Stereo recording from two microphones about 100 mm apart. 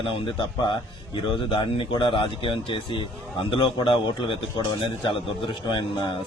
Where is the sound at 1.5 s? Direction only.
55° left (ahead or behind).